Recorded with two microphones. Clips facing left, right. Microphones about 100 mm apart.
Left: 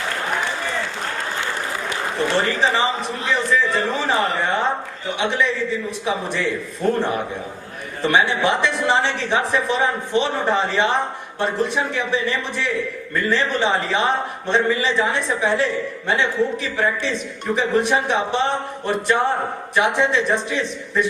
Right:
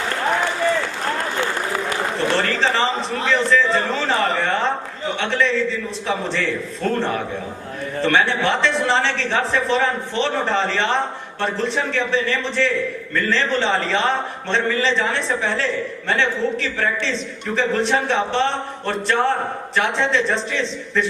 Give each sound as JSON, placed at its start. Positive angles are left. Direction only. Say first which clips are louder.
{"t": 2.4, "sound": "a man's voice", "louder": "even", "side_deg": 15}